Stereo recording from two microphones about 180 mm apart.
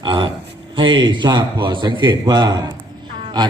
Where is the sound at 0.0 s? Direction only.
25° right (ahead or behind).